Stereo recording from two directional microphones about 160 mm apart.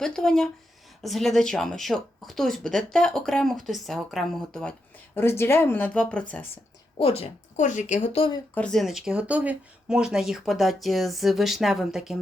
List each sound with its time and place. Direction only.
0.0 s speech: 5° left (ahead or behind)
5.1 s speech: 15° left (ahead or behind)
7.0 s a woman's voice: 40° left (ahead or behind)
8.5 s speech: 5° left (ahead or behind)